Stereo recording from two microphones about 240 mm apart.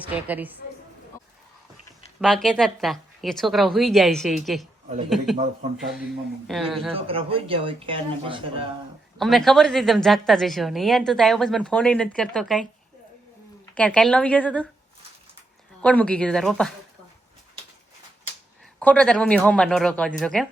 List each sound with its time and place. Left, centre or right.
0.0 s a woman's voice: centre
2.2 s a woman's voice: centre
6.5 s a woman's voice: centre
6.9 s speech: right
9.1 s a woman's voice: centre
13.7 s a woman's voice: centre
15.8 s a woman's voice: centre
18.8 s a woman's voice: centre